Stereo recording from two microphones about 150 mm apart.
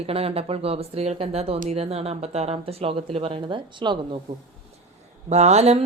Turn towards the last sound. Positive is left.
turn(degrees=-45)  # may be behind; listen again after turning